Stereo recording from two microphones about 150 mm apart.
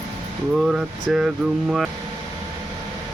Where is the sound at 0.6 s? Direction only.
5° right (ahead or behind).